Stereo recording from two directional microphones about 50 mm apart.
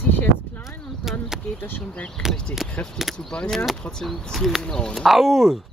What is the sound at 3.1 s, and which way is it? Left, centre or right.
Speech, left.